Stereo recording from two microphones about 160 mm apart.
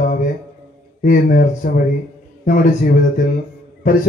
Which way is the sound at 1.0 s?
55° left (ahead or behind).